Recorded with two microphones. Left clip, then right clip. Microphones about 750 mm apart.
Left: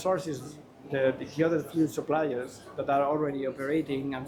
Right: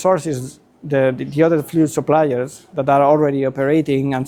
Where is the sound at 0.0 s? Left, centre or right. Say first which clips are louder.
Right 12 dB; right.